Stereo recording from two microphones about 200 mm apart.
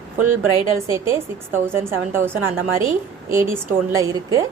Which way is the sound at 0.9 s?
15° right (ahead or behind).